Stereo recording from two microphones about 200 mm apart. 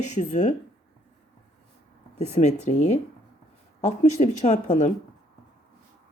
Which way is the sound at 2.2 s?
35° left (ahead or behind).